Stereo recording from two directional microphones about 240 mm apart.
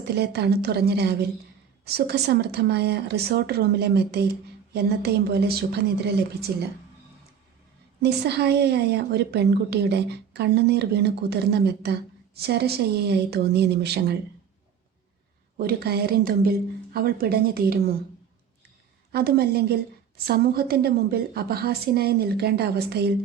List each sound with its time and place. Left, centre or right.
0.2 s a woman's voice: right
8.0 s a woman's voice: right
15.5 s a woman's voice: right
19.1 s a woman's voice: right